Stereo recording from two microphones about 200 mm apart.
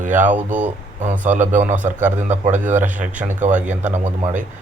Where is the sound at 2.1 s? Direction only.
35° right (ahead or behind).